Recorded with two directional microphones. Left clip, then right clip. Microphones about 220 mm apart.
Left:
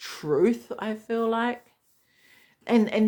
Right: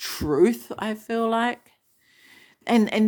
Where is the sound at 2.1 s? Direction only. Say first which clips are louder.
Right 5 dB; 50° right (ahead or behind).